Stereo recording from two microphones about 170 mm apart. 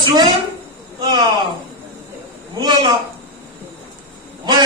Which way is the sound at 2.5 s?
25° right (ahead or behind).